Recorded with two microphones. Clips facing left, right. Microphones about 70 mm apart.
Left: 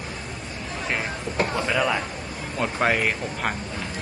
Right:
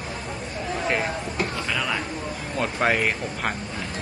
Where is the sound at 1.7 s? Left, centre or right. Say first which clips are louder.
Left 3 dB; centre.